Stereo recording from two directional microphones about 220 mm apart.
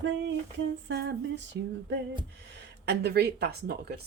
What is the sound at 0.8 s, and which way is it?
Speech, 50° right (ahead or behind).